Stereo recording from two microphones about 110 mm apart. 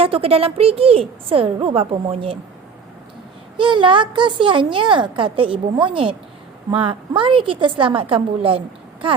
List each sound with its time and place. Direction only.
0.0 s a woman's voice: 60° right (ahead or behind)
3.6 s a woman's voice: 45° right (ahead or behind)